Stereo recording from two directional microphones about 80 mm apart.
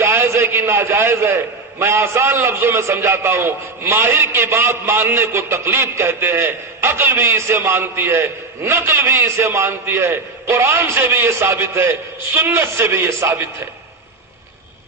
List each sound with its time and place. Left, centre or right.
0.0 s a man's voice: right